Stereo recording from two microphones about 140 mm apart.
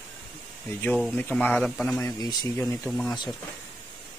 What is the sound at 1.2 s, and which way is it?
Speech, 10° left (ahead or behind).